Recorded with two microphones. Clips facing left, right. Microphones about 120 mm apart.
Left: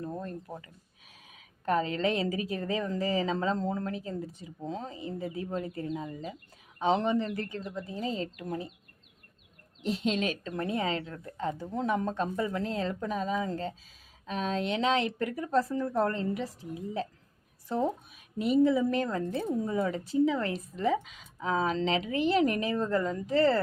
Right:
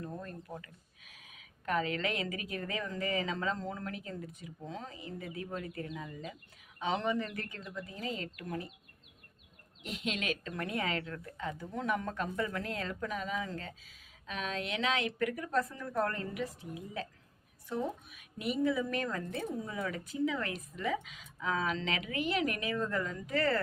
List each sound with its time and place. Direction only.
0.0 s a sound: 30° left (ahead or behind)
1.3 s speech: 35° left (ahead or behind)
9.8 s speech: 30° left (ahead or behind)
18.3 s speech: 30° left (ahead or behind)